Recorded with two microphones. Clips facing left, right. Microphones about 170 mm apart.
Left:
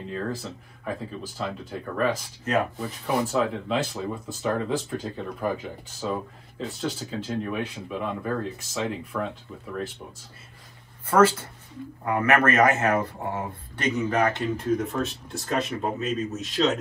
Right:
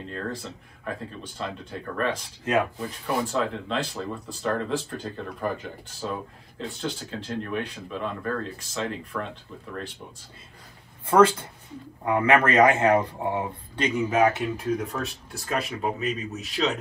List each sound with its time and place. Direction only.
0.8 s speech: 5° left (ahead or behind)
11.1 s speech: 15° right (ahead or behind)
14.4 s speech: centre (ahead or behind)